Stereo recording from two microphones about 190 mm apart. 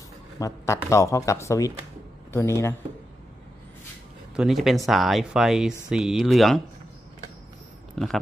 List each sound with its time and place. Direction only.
0.4 s speech: 15° left (ahead or behind)
4.4 s speech: centre (ahead or behind)
8.0 s a sound: centre (ahead or behind)